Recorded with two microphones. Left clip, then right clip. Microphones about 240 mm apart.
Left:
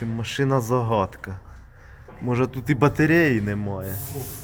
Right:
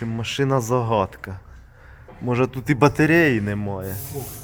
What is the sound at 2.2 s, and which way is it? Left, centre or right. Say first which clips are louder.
Speech: right 2 dB; right.